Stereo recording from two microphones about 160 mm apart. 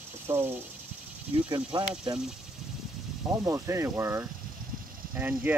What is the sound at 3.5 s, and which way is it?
Speech, 20° right (ahead or behind).